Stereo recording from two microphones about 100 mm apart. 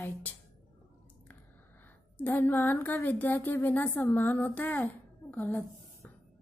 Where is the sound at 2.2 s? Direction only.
20° left (ahead or behind).